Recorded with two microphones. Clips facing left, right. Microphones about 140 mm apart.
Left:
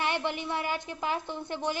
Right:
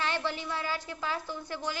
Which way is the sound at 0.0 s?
15° left (ahead or behind).